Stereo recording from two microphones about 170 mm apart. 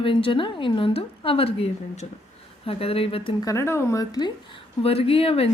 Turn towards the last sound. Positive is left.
turn(degrees=35)  # may be behind; listen again after turning